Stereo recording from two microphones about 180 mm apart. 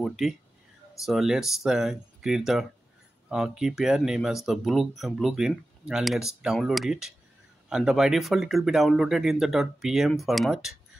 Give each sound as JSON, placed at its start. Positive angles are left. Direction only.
{"t": 0.0, "sound": "speech", "side_deg": 0}